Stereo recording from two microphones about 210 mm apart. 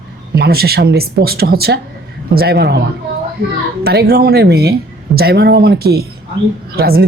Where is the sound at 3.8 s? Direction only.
50° right (ahead or behind).